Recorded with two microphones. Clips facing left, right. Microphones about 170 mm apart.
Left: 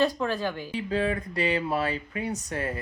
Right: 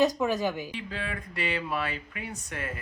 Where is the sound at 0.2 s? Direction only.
10° right (ahead or behind).